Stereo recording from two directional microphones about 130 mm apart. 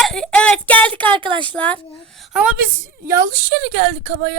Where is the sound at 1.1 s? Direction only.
40° right (ahead or behind).